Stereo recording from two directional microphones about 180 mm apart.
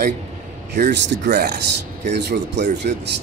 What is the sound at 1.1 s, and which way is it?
Speech, 60° right (ahead or behind).